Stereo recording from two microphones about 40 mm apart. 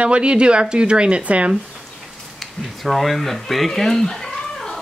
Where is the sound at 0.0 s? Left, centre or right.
Right.